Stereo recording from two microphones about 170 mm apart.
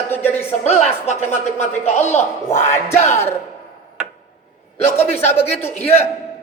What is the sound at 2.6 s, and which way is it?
Speech, 15° left (ahead or behind).